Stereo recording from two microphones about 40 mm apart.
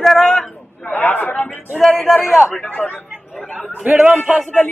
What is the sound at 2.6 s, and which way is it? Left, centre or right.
Speech, left.